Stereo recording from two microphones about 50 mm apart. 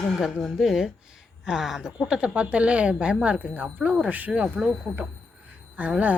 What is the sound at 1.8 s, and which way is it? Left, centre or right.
Speech, centre.